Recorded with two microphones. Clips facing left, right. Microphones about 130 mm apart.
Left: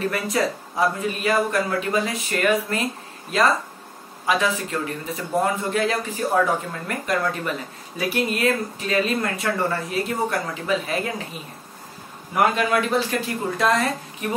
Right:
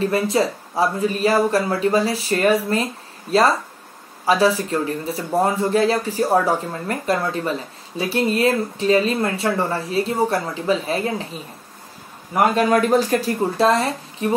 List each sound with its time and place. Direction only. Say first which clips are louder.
0.1 s speech: right 4 dB; 30° right (ahead or behind)
12.5 s speech: right 5 dB; 40° right (ahead or behind)